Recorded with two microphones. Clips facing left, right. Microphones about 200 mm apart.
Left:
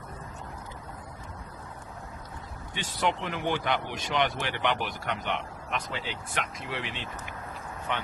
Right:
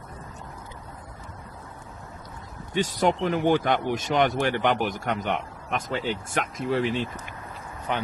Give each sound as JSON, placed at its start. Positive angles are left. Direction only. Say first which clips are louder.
{"t": 2.7, "sound": "speech", "louder": "right 7 dB", "side_deg": -40}